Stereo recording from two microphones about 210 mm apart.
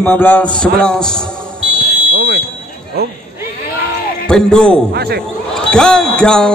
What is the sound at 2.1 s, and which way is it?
Fire alarm, 45° right (ahead or behind).